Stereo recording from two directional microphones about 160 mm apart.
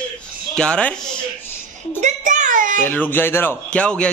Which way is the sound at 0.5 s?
5° left (ahead or behind).